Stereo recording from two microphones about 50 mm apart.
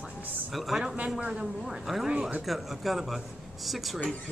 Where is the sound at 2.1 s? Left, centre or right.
Centre.